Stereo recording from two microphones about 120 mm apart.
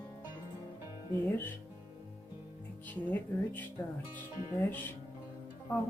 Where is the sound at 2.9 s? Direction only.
15° left (ahead or behind).